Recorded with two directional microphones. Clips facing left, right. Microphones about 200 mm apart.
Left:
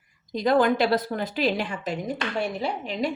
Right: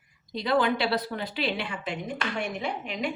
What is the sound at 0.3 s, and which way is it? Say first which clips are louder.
A woman's voice: left 4 dB; 45° left (ahead or behind).